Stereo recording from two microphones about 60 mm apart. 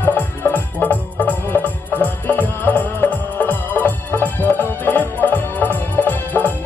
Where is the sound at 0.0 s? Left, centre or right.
Left.